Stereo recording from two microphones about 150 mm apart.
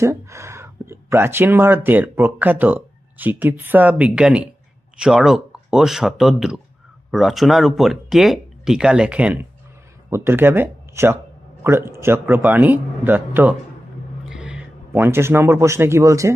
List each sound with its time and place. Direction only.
0.0 s a man's voice: 20° right (ahead or behind)